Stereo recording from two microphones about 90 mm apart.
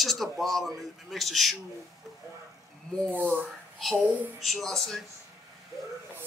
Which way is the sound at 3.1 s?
20° right (ahead or behind).